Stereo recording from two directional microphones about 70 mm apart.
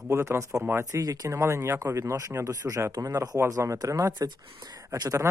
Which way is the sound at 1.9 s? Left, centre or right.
Right.